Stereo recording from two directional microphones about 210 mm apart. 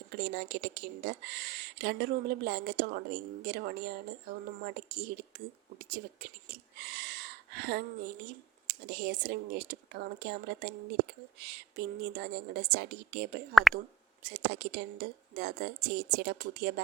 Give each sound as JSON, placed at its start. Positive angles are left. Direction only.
{"t": 0.1, "sound": "speech", "side_deg": -50}
{"t": 6.8, "sound": "a sound", "side_deg": -50}
{"t": 8.6, "sound": "speech", "side_deg": -50}
{"t": 13.5, "sound": "speech", "side_deg": 0}
{"t": 14.3, "sound": "speech", "side_deg": -50}